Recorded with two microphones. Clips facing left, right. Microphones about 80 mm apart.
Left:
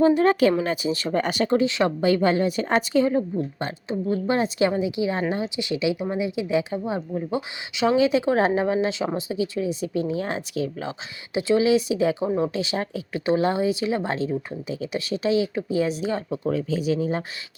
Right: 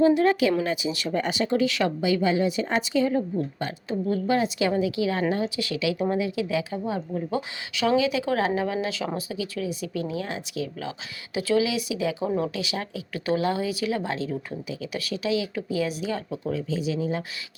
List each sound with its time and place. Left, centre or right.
0.0 s speech: left
1.2 s a woman's voice: left
1.5 s speech: left
2.0 s a woman's voice: left
3.1 s speech: left
7.9 s speech: left
12.2 s speech: left
16.5 s a woman's voice: left